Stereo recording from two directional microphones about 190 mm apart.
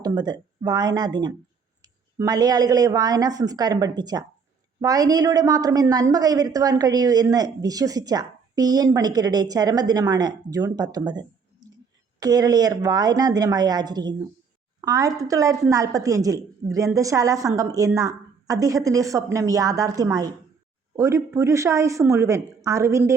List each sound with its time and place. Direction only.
0.0 s a woman's voice: 20° right (ahead or behind)